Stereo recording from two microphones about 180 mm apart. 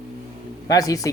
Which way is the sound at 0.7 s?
20° left (ahead or behind).